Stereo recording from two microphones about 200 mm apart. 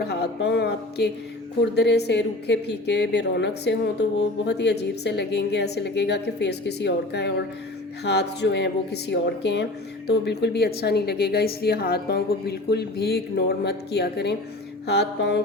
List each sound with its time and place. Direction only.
0.0 s a woman's voice: 55° left (ahead or behind)